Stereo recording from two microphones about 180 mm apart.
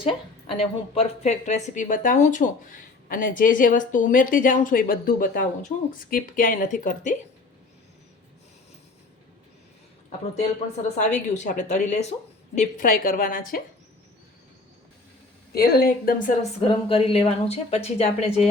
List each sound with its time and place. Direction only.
0.0 s a woman's voice: 30° left (ahead or behind); by 7.2 s 45° left (ahead or behind)
11.0 s a woman's voice: 40° left (ahead or behind)
15.5 s a woman's voice: 55° left (ahead or behind)
16.6 s a woman's voice: 30° left (ahead or behind)